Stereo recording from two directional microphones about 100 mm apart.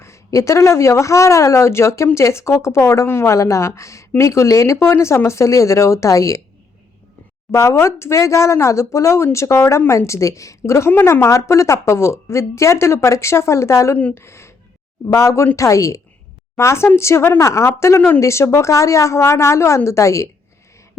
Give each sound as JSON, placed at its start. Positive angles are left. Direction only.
{"t": 0.0, "sound": "speech", "side_deg": 30}
{"t": 7.5, "sound": "a woman's voice", "side_deg": 30}